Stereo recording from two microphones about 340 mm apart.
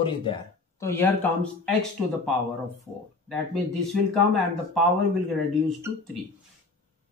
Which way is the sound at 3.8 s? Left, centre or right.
Centre.